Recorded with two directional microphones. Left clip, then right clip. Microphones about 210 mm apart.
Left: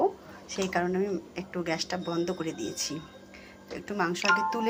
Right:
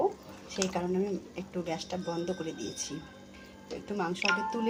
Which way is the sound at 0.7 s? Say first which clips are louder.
Left 6 dB; 5° left (ahead or behind).